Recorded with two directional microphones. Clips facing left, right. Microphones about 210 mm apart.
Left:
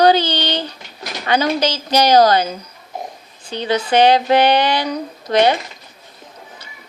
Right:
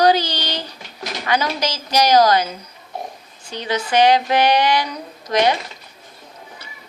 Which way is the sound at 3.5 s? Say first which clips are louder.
Left 3 dB; 30° left (ahead or behind).